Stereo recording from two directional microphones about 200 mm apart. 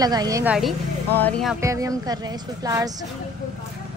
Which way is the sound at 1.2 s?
5° left (ahead or behind).